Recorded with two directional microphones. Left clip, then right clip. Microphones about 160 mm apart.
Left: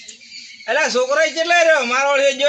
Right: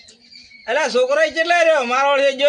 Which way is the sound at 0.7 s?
30° right (ahead or behind).